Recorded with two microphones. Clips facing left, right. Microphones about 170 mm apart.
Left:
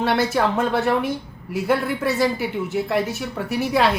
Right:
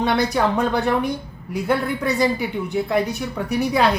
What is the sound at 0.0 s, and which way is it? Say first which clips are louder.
A woman's voice: even; 5° left (ahead or behind).